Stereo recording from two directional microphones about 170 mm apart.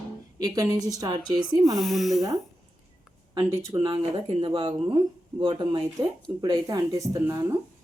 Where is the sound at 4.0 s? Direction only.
30° right (ahead or behind); by 7.6 s 15° right (ahead or behind).